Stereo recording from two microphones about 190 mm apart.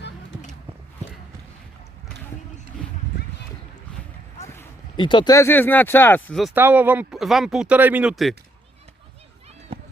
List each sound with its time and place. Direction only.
2.7 s a sound: centre (ahead or behind)
4.9 s speech: 25° left (ahead or behind); by 6.5 s 5° left (ahead or behind)
6.5 s speech: 10° right (ahead or behind)
9.7 s run: 30° right (ahead or behind)